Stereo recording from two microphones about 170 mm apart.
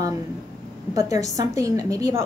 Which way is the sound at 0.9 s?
20° right (ahead or behind).